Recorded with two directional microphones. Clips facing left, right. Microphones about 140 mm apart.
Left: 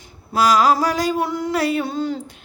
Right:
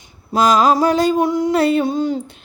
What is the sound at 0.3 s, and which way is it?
Speech, 25° right (ahead or behind).